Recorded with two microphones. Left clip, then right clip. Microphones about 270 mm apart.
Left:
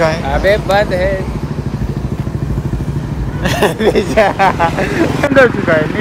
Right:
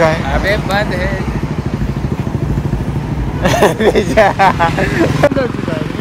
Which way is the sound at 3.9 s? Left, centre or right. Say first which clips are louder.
Right 1 dB; centre.